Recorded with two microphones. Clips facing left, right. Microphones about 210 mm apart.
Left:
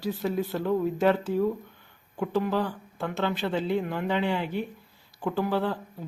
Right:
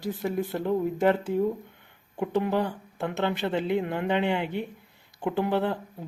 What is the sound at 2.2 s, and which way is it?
Speech, 20° right (ahead or behind).